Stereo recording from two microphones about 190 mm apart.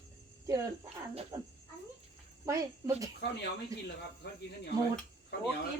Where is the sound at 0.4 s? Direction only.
15° right (ahead or behind).